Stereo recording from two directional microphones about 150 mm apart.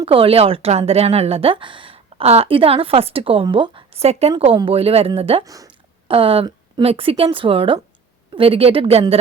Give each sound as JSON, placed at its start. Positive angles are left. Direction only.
{"t": 0.0, "sound": "a woman's voice", "side_deg": -40}
{"t": 5.4, "sound": "speech", "side_deg": -25}
{"t": 6.1, "sound": "a woman's voice", "side_deg": -35}